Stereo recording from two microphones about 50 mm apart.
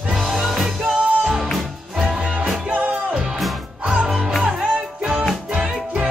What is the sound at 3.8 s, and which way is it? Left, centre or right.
Music, centre.